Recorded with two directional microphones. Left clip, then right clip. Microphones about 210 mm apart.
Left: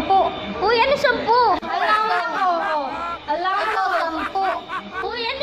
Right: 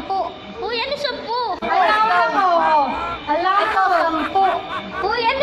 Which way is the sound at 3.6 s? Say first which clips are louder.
Right 4 dB; centre (ahead or behind).